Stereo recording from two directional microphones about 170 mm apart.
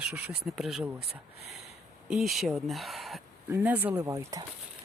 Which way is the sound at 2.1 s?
Centre (ahead or behind).